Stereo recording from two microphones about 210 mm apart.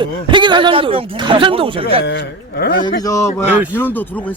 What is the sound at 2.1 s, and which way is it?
Speech, 50° left (ahead or behind).